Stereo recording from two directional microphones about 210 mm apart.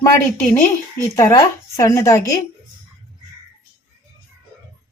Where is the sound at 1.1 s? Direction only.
15° left (ahead or behind).